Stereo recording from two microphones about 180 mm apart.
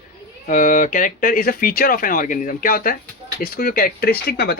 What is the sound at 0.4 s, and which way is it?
Speech, 45° left (ahead or behind).